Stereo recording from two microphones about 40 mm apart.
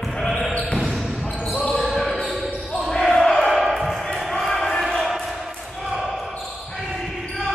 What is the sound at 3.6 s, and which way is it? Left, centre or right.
Basketball bounce, centre.